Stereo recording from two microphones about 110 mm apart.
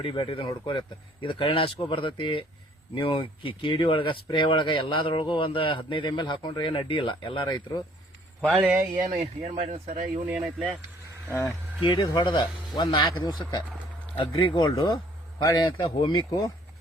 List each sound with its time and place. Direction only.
0.0 s speech: 55° left (ahead or behind)
9.0 s speech: 75° right (ahead or behind)
10.2 s speech: 10° right (ahead or behind)
11.3 s speech: 20° left (ahead or behind)
11.8 s speech: 50° left (ahead or behind)